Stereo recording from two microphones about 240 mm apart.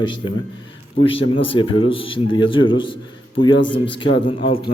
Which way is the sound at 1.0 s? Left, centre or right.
Left.